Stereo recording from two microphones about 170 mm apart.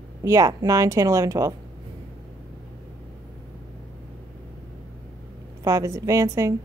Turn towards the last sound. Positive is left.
turn(degrees=-20)  # may be behind; listen again after turning